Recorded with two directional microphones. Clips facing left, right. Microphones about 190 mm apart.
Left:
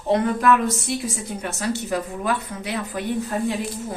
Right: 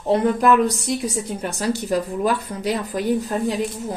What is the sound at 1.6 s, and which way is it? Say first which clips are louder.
Speech: right 3 dB; 35° right (ahead or behind).